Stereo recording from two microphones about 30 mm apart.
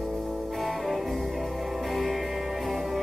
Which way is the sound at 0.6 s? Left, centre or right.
Centre.